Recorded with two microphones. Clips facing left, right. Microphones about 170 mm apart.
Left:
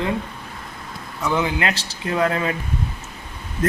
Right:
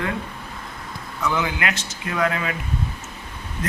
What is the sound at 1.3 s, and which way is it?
A man's voice, 30° left (ahead or behind).